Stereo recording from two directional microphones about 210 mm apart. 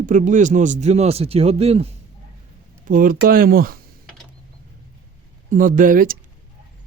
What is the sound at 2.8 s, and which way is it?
Speech, 40° right (ahead or behind).